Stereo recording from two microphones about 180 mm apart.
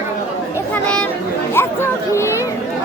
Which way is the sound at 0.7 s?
5° left (ahead or behind).